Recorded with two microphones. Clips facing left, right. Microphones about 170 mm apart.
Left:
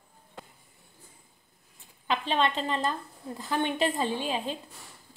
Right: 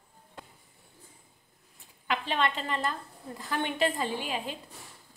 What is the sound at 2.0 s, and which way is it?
A woman's voice, 20° left (ahead or behind).